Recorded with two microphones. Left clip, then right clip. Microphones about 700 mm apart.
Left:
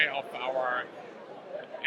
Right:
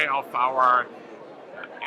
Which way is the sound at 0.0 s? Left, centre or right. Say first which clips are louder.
Right 6 dB; right.